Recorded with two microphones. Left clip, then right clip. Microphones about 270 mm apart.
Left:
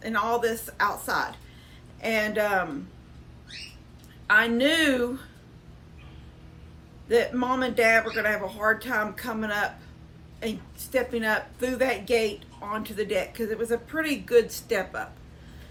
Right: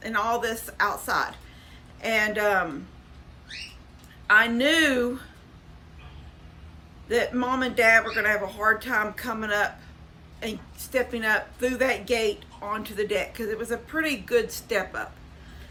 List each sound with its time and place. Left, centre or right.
0.0 s a woman's voice: centre
4.3 s a woman's voice: centre
7.1 s a woman's voice: centre